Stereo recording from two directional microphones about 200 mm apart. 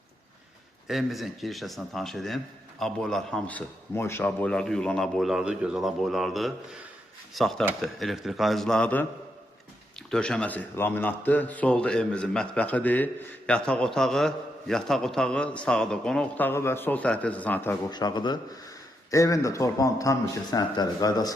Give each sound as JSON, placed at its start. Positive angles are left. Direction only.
{"t": 0.9, "sound": "a man's voice", "side_deg": 0}
{"t": 10.1, "sound": "a man's voice", "side_deg": 5}
{"t": 17.9, "sound": "a man's voice", "side_deg": 20}